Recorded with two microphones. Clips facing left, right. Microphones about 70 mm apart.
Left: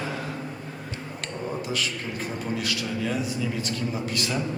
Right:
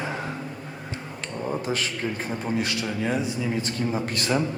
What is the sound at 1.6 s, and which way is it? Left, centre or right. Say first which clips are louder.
A man's voice: right 3 dB; right.